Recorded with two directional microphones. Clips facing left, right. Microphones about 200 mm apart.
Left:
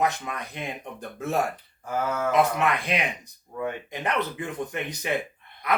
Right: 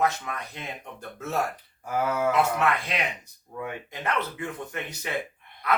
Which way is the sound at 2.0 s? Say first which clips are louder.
Right 3 dB; 10° right (ahead or behind).